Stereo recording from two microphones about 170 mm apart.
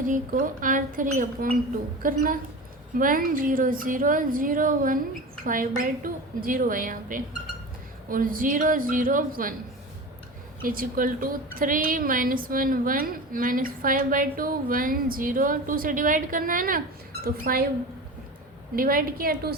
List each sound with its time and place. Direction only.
0.0 s speech: 50° right (ahead or behind)
10.6 s speech: 55° right (ahead or behind)
18.8 s speech: 60° right (ahead or behind)